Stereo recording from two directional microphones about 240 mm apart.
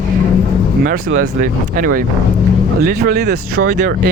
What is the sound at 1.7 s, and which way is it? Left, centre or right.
Speech, right.